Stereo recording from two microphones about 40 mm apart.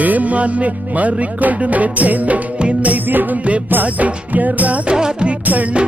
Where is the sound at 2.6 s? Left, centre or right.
Right.